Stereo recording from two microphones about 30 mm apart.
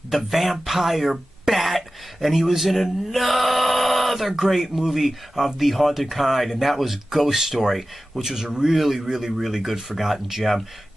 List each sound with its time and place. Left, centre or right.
0.1 s speech: centre
8.2 s speech: centre
8.7 s speech: centre